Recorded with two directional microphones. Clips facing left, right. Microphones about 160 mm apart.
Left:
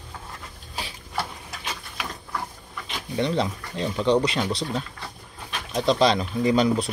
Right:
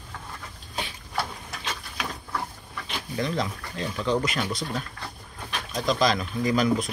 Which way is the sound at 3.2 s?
30° left (ahead or behind).